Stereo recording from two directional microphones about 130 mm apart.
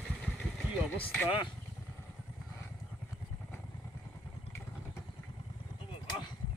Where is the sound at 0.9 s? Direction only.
10° left (ahead or behind).